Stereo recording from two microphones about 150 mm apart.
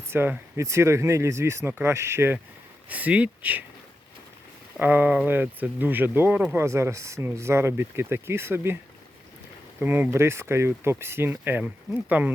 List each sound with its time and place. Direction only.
0.1 s speech: 15° right (ahead or behind)
4.8 s speech: 10° right (ahead or behind)
9.8 s speech: 15° right (ahead or behind)